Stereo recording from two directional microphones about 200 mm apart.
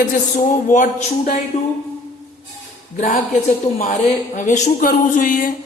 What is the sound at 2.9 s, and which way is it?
A woman's voice, 40° left (ahead or behind).